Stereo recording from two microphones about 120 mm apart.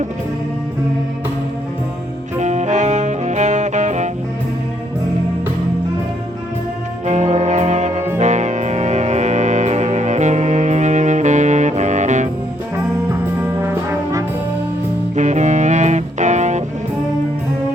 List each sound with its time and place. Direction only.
2.4 s music: 80° right
7.0 s brass instrument: 75° right (ahead or behind)
8.2 s music: 80° right
13.4 s brass instrument: 20° right (ahead or behind)
15.1 s music: 80° right